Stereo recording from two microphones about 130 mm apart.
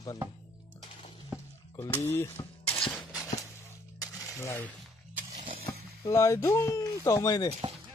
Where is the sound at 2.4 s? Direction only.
35° left (ahead or behind).